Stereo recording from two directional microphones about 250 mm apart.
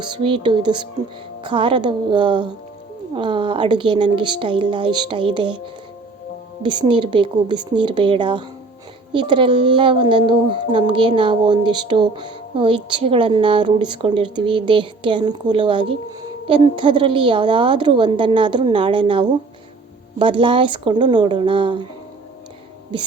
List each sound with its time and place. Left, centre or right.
0.0 s speech: centre
6.6 s speech: centre